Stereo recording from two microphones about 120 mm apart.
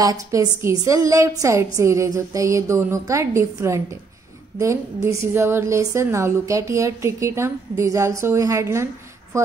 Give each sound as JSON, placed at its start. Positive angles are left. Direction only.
{"t": 0.0, "sound": "a woman's voice", "side_deg": -30}